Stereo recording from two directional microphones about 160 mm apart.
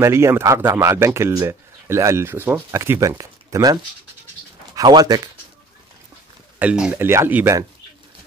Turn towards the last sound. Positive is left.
turn(degrees=-15)  # may be behind; listen again after turning